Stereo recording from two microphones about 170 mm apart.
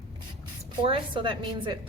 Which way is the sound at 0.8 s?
30° right (ahead or behind).